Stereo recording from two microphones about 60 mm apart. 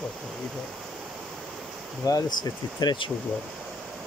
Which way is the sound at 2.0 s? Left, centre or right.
Left.